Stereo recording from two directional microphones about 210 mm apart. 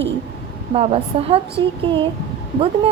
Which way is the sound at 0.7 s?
30° right (ahead or behind).